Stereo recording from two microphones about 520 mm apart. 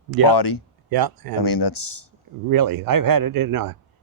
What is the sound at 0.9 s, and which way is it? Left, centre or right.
Speech, right.